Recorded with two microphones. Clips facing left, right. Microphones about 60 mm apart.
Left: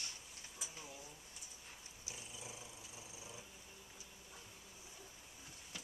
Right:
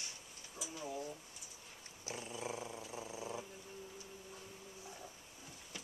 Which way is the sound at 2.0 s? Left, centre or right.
Right.